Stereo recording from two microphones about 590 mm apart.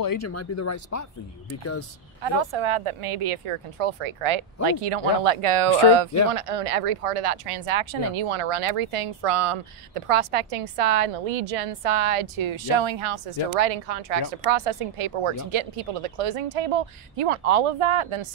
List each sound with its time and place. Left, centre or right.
0.0 s speech: left
2.2 s speech: right
14.4 s a woman's voice: right